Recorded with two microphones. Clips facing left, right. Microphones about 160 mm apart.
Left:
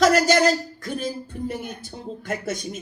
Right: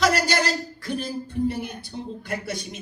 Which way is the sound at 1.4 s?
45° left (ahead or behind).